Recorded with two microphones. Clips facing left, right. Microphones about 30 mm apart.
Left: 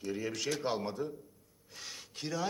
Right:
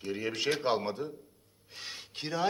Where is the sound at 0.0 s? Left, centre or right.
Right.